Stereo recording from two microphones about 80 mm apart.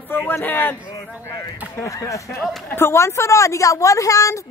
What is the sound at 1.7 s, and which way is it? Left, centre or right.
Speech, left.